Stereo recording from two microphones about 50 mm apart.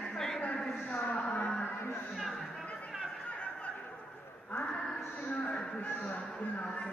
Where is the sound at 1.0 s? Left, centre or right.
Left.